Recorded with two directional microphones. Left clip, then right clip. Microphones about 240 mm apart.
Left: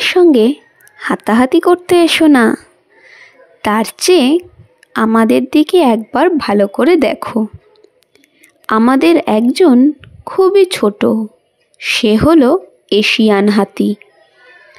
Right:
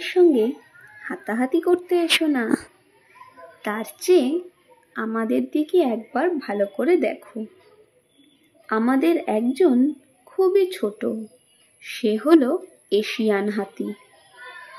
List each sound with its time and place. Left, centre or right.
0.0 s a child's voice: left
3.6 s a child's voice: left
8.6 s a child's voice: left